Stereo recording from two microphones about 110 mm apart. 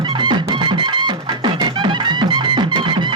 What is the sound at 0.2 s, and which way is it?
Music, 45° right (ahead or behind).